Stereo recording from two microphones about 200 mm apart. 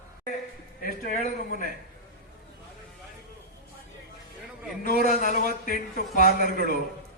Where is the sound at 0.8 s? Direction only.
45° left (ahead or behind).